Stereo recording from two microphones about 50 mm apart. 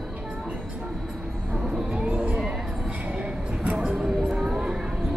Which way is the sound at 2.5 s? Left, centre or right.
Centre.